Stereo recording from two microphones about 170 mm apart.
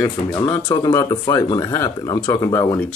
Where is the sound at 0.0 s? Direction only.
15° left (ahead or behind).